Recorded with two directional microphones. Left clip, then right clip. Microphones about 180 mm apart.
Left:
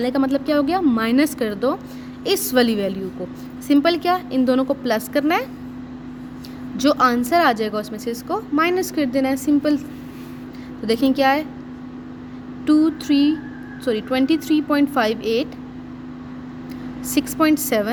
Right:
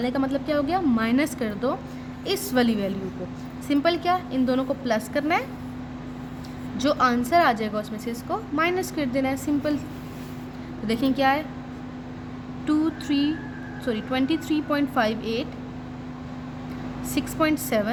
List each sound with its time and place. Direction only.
0.0 s speech: 40° left (ahead or behind)
6.7 s speech: 40° left (ahead or behind)
10.8 s speech: 40° left (ahead or behind)
12.6 s speech: 40° left (ahead or behind)
17.2 s speech: 40° left (ahead or behind)